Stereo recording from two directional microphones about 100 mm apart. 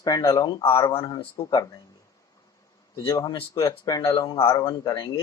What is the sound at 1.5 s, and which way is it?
Speech, 30° left (ahead or behind).